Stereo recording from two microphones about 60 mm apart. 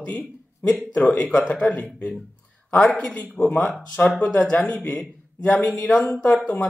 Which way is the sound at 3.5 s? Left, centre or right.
Left.